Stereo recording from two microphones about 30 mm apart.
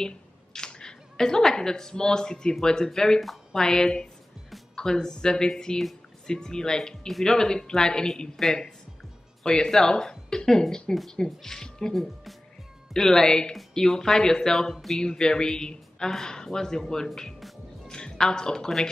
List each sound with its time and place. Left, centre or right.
0.0 s a woman's voice: left
8.4 s speech: centre
9.4 s speech: centre
11.9 s speech: centre
12.9 s speech: left
14.7 s speech: centre
15.0 s a woman's voice: left